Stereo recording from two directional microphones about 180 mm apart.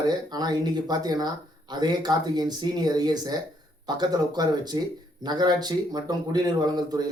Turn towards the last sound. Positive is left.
turn(degrees=-20)  # may be behind; listen again after turning